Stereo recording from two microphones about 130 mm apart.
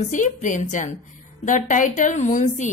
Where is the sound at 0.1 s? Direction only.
75° left (ahead or behind).